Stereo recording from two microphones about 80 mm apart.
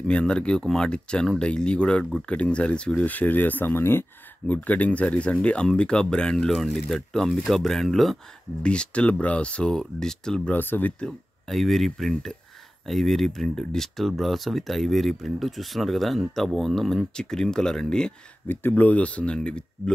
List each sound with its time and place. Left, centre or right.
0.0 s speech: centre
8.6 s speech: centre
10.5 s speech: left
11.0 s speech: centre
18.5 s speech: left